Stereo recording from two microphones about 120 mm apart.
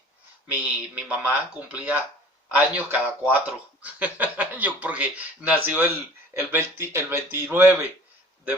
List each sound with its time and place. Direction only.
0.6 s speech: 10° right (ahead or behind)